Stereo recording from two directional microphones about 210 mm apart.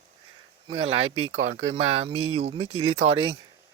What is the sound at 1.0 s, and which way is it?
Speech, 80° right.